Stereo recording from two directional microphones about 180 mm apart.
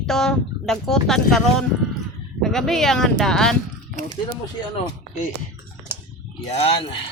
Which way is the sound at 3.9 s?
45° right (ahead or behind).